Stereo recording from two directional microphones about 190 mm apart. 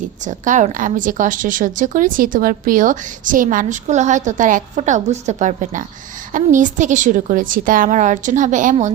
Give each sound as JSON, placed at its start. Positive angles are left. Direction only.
{"t": 0.3, "sound": "a woman's voice", "side_deg": -40}